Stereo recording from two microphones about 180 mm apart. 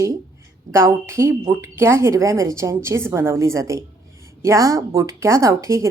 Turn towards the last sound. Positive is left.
turn(degrees=-15)  # may be behind; listen again after turning